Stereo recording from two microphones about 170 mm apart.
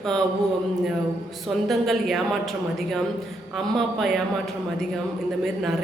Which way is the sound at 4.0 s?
Centre (ahead or behind).